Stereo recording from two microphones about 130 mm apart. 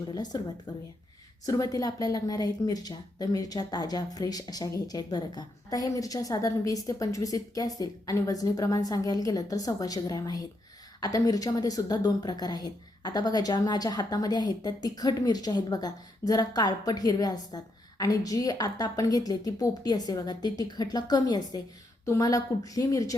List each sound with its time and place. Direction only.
0.1 s speech: 30° left (ahead or behind)